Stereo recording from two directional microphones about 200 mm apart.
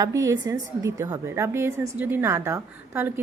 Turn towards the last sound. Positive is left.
turn(degrees=-10)  # may be behind; listen again after turning